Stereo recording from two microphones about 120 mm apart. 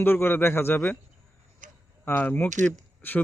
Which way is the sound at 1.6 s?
90° right.